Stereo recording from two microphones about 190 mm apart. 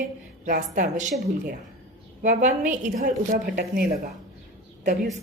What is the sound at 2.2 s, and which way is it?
A woman's voice, 45° right (ahead or behind).